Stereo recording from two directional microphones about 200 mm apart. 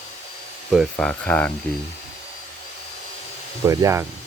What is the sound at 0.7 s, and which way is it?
Speech, centre (ahead or behind).